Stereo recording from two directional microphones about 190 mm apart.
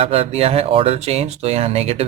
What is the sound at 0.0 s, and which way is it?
Speech, 30° right (ahead or behind).